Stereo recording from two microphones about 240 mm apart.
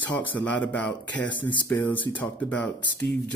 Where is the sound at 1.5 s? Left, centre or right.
Centre.